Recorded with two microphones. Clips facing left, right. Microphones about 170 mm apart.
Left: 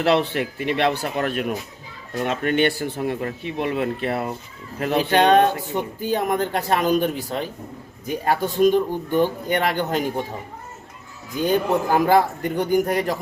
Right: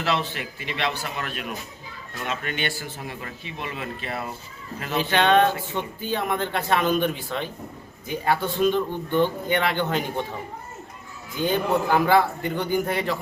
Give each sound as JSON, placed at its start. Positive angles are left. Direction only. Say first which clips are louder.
{"t": 0.0, "sound": "a man's voice", "louder": "left 7 dB", "side_deg": 60}
{"t": 11.4, "sound": "a man's voice", "louder": "left 2 dB", "side_deg": 40}